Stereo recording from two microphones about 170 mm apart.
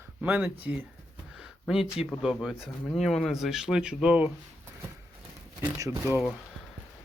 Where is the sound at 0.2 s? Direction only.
10° right (ahead or behind).